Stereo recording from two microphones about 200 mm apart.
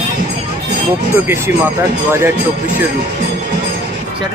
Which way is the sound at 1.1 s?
10° right (ahead or behind).